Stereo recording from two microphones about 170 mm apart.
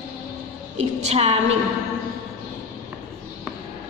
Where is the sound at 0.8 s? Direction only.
40° right (ahead or behind).